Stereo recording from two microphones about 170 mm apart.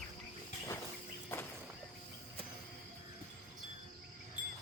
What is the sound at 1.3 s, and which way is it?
Walk, 15° left (ahead or behind).